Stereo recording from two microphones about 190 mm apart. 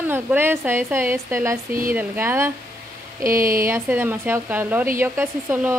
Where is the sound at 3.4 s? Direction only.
50° right (ahead or behind).